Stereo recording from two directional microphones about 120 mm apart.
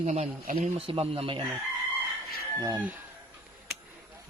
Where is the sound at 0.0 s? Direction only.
70° right (ahead or behind).